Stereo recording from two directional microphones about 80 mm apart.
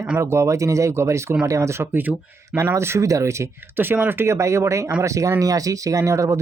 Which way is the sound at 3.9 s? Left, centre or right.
Right.